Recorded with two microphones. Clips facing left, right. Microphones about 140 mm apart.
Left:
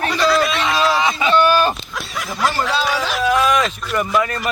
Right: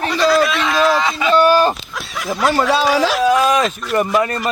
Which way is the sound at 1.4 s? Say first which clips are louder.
Right 3 dB; 35° right (ahead or behind).